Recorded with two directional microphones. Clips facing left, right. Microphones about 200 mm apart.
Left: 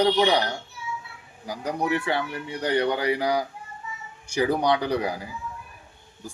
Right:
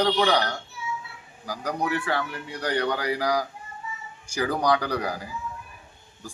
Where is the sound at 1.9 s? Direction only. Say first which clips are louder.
Left 2 dB; 20° left (ahead or behind).